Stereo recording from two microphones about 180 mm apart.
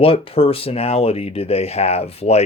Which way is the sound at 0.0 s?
30° left (ahead or behind).